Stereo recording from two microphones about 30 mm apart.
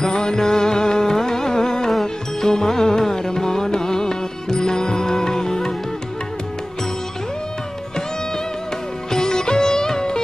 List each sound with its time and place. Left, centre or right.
0.0 s music: left
9.1 s sitar: left